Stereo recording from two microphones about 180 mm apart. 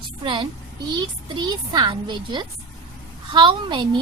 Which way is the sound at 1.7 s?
25° right (ahead or behind).